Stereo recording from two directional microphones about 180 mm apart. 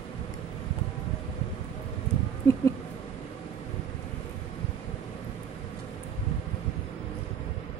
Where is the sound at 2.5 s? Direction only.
15° left (ahead or behind).